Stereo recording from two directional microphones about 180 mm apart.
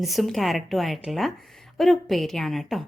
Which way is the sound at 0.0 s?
Centre (ahead or behind).